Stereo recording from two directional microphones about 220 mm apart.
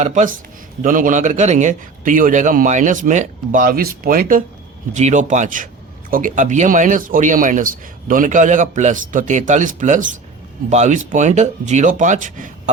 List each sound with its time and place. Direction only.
0.0 s speech: 35° right (ahead or behind)